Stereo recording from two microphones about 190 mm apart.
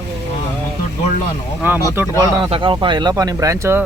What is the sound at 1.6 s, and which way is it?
Speech, 10° right (ahead or behind).